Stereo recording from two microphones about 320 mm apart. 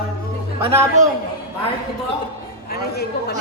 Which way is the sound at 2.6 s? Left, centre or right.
Left.